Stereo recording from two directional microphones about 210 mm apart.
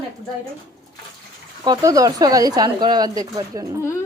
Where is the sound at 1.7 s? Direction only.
15° right (ahead or behind).